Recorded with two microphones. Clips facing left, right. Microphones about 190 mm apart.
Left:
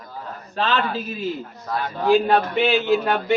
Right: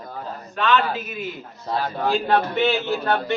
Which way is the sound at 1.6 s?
30° right (ahead or behind).